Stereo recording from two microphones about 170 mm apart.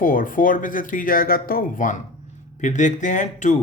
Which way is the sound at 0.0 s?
55° left (ahead or behind).